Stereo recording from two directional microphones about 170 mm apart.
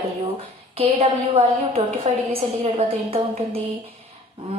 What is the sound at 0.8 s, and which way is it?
A woman's voice, 35° right (ahead or behind).